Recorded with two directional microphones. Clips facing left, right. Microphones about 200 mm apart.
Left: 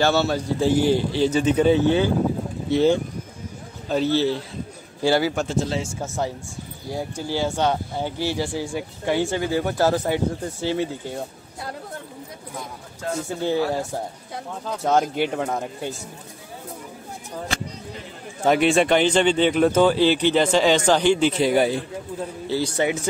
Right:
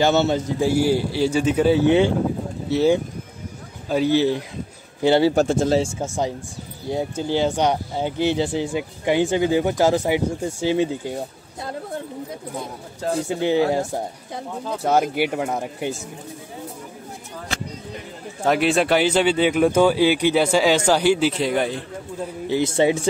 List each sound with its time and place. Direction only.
0.0 s speech: 20° right (ahead or behind)
1.9 s a man's voice: 25° right (ahead or behind)
2.7 s a man's voice: 5° right (ahead or behind); by 5.3 s 20° right (ahead or behind)
5.3 s speech: 45° right (ahead or behind)
5.8 s a man's voice: 25° right (ahead or behind)
6.0 s speech: 15° right (ahead or behind)
12.5 s speech: 35° right (ahead or behind)
13.3 s speech: 20° right (ahead or behind)
14.8 s speech: 5° right (ahead or behind)
18.4 s speech: centre (ahead or behind)
22.5 s a man's voice: 25° right (ahead or behind)